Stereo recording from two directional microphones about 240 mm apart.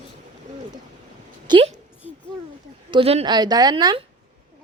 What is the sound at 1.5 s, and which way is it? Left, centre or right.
Speech, right.